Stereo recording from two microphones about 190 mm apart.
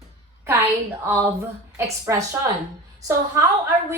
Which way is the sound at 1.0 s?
15° right (ahead or behind).